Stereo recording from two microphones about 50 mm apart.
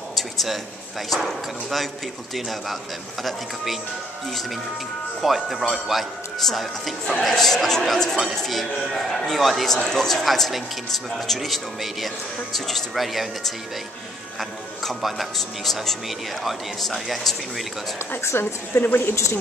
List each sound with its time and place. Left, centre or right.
0.1 s a sound: centre
1.1 s speech: centre
3.3 s speech: centre
5.2 s speech: centre
18.2 s a woman's voice: left